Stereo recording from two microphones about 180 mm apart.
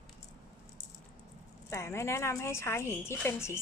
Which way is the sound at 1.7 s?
15° left (ahead or behind).